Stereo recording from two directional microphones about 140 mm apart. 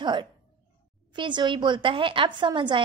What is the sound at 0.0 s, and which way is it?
A woman's voice, 30° right (ahead or behind).